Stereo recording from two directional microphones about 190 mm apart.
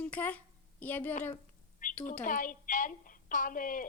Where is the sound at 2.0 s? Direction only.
45° left (ahead or behind).